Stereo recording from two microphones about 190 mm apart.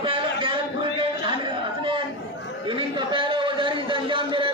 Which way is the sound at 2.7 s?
25° right (ahead or behind).